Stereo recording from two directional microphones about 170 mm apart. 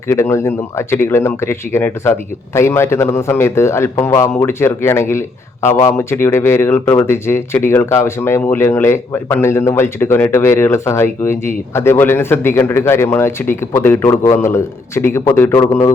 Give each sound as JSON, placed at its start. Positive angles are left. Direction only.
{"t": 0.1, "sound": "speech", "side_deg": 15}